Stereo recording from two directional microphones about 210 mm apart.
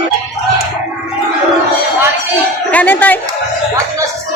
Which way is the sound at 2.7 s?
10° left (ahead or behind).